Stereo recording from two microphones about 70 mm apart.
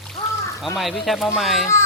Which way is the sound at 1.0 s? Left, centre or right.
Centre.